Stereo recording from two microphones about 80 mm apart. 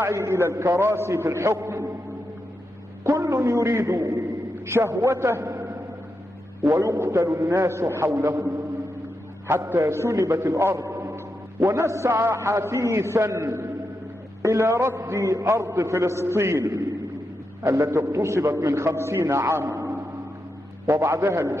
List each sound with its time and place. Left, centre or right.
0.0 s a man's voice: right
3.0 s a man's voice: right
9.5 s a man's voice: right